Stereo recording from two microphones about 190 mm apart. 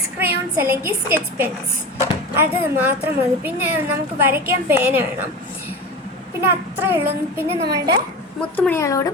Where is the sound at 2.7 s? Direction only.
10° right (ahead or behind).